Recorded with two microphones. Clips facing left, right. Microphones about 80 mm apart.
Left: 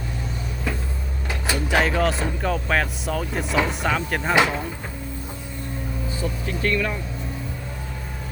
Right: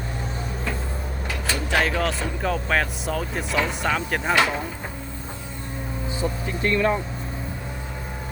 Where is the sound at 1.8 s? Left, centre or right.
Centre.